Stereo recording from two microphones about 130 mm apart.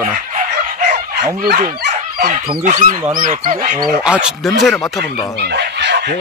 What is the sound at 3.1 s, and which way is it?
Speech, 90° right.